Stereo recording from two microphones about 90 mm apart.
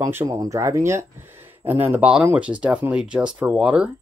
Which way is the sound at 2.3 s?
15° right (ahead or behind).